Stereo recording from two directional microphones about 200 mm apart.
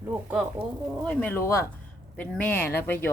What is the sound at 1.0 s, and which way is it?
Speech, 5° left (ahead or behind).